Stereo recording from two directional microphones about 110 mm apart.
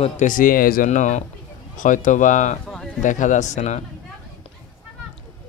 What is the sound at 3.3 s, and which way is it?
Speech, 90° left.